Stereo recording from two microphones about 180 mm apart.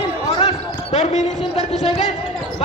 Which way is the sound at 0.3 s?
35° left (ahead or behind).